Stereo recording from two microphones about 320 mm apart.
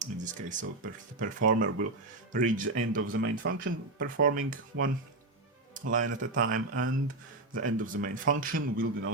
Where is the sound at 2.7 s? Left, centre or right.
Right.